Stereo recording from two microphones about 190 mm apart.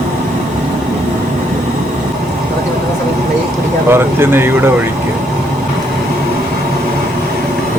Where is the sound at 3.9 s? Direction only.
10° right (ahead or behind).